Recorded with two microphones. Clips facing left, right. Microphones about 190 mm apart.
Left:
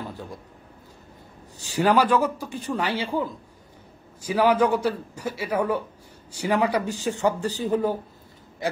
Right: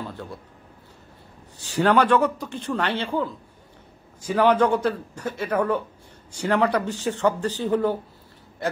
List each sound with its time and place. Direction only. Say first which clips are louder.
0.0 s a sound: right 1 dB; 10° left (ahead or behind)
1.6 s a man's voice: right 1 dB; 10° left (ahead or behind)
4.3 s a man's voice: right 1 dB; 10° left (ahead or behind)